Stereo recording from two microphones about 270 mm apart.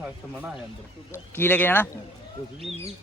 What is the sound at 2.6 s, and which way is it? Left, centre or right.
Speech, right.